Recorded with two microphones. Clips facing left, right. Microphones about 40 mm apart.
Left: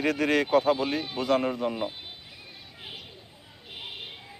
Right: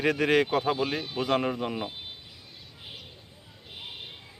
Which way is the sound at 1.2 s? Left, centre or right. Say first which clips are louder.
Left 1 dB; right.